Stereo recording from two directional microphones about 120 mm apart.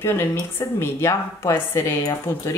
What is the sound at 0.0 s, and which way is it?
Speech, 20° left (ahead or behind).